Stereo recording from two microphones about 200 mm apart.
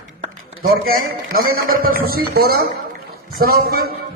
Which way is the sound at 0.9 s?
45° right (ahead or behind).